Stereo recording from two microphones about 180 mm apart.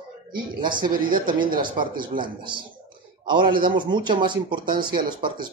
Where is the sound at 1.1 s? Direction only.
50° right (ahead or behind).